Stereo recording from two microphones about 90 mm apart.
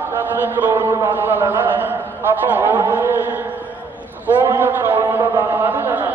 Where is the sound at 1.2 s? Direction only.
25° right (ahead or behind).